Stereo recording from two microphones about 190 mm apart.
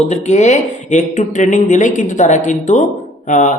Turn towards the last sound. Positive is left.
turn(degrees=40)  # may be behind; listen again after turning